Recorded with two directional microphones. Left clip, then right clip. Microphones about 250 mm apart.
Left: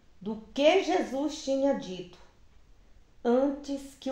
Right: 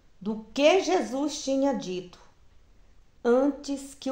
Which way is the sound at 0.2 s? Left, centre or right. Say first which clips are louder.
Right 2 dB; right.